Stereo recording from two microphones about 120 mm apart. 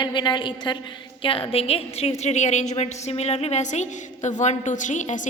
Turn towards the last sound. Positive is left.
turn(degrees=90)